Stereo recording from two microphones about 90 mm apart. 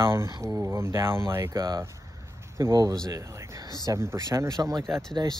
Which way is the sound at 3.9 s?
35° right (ahead or behind).